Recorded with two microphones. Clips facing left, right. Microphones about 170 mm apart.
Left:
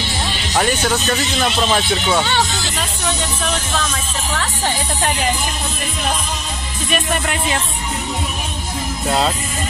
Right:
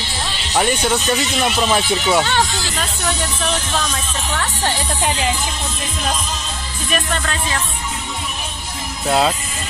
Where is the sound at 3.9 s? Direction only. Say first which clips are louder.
Even; 5° left (ahead or behind).